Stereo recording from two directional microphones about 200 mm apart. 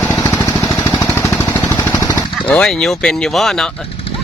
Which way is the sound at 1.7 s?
15° left (ahead or behind).